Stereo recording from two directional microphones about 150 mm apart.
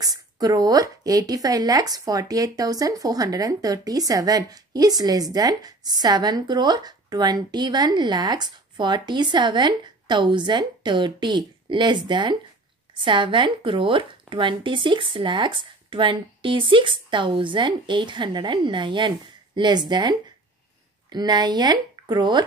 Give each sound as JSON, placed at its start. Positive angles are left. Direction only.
{"t": 0.0, "sound": "speech", "side_deg": -25}